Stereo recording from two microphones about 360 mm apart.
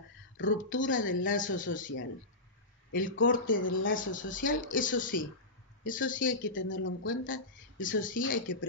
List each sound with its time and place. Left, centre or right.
0.4 s speech: left